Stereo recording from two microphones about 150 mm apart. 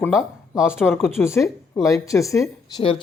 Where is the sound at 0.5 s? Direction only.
5° right (ahead or behind).